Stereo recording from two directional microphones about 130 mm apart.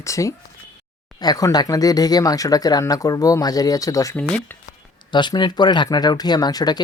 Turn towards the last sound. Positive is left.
turn(degrees=30)  # may be behind; listen again after turning